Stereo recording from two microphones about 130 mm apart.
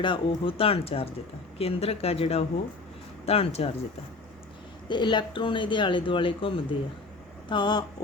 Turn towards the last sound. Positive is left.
turn(degrees=35)  # may be behind; listen again after turning